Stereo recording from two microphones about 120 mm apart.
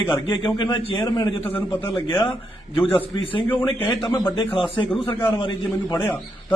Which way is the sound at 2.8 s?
50° left (ahead or behind).